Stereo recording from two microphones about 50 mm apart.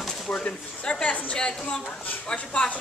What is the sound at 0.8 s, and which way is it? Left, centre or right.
Speech, left.